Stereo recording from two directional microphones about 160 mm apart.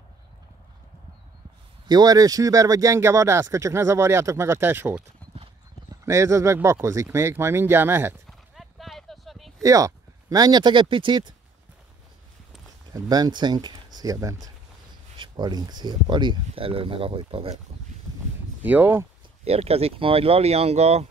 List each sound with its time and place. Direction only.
1.9 s speech: 25° right (ahead or behind)
6.0 s speech: 20° right (ahead or behind)
8.3 s horse: centre (ahead or behind)
9.6 s speech: 20° right (ahead or behind)
12.9 s speech: 25° right (ahead or behind)
18.6 s speech: 10° right (ahead or behind)
19.4 s speech: 40° right (ahead or behind)